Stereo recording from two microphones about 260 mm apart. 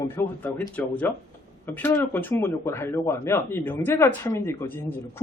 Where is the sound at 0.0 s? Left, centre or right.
Centre.